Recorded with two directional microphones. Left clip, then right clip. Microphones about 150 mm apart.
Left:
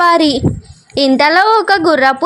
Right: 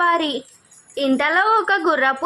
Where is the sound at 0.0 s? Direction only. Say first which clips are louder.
Left 8 dB; 35° left (ahead or behind).